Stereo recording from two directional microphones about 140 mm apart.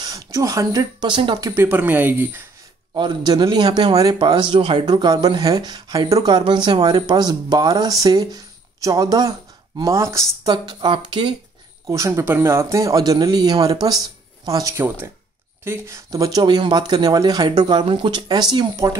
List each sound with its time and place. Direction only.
0.0 s speech: 25° right (ahead or behind)
1.5 s speech: 15° right (ahead or behind)
2.9 s a man's voice: 35° right (ahead or behind)
11.8 s speech: 20° right (ahead or behind)